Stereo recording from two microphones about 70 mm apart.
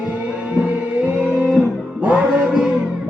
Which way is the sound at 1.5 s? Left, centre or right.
Centre.